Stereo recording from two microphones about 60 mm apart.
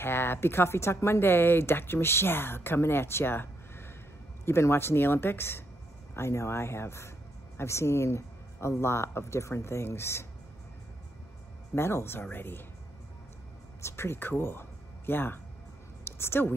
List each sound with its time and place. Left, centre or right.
0.0 s a woman's voice: left
11.7 s speech: left
13.7 s a woman's voice: left